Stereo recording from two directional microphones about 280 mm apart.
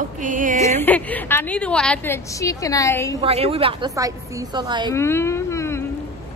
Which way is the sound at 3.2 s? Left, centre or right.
Centre.